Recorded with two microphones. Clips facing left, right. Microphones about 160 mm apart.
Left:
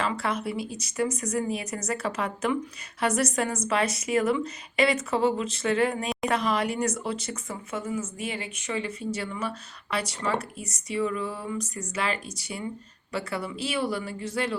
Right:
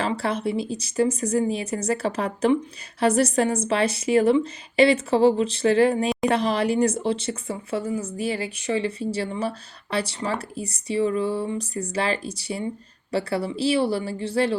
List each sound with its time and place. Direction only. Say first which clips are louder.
0.0 s speech: right 4 dB; 30° right (ahead or behind)